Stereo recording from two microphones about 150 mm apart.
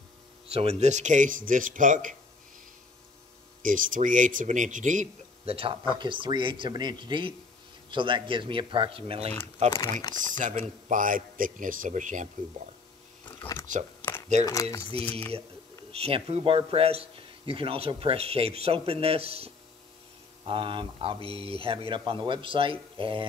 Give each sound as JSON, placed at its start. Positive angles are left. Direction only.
{"t": 0.5, "sound": "speech", "side_deg": -45}
{"t": 3.6, "sound": "speech", "side_deg": -65}
{"t": 13.4, "sound": "speech", "side_deg": 15}
{"t": 15.0, "sound": "speech", "side_deg": 10}
{"t": 15.9, "sound": "speech", "side_deg": -40}